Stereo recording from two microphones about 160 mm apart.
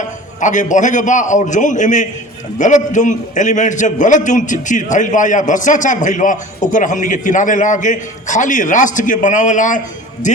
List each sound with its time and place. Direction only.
0.3 s a man's voice: 50° left (ahead or behind)